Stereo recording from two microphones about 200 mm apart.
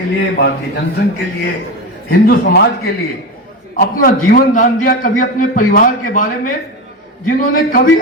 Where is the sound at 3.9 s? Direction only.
45° left (ahead or behind).